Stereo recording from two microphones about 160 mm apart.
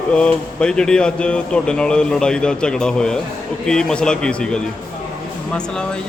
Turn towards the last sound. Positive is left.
turn(degrees=5)  # may be behind; listen again after turning